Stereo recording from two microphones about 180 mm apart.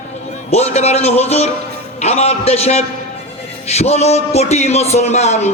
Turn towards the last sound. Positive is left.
turn(degrees=40)  # may be behind; listen again after turning